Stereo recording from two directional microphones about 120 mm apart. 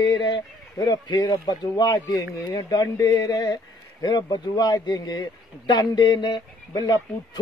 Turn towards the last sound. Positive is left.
turn(degrees=35)  # may be behind; listen again after turning